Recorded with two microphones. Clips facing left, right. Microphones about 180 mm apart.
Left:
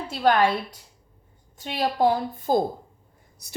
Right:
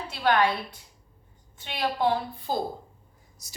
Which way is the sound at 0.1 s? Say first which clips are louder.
Left 4 dB; 40° left (ahead or behind).